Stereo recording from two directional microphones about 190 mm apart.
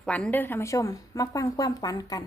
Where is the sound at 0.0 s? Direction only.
5° left (ahead or behind).